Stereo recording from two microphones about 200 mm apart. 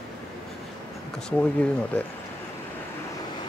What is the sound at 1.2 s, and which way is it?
Speech, 5° left (ahead or behind).